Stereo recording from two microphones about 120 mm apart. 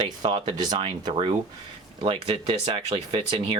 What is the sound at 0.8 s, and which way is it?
Speech, 50° right (ahead or behind).